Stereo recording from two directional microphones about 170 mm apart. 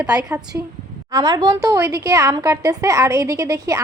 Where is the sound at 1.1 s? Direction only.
25° right (ahead or behind).